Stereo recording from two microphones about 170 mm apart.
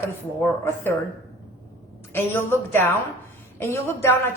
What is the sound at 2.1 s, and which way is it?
A woman's voice, 10° left (ahead or behind).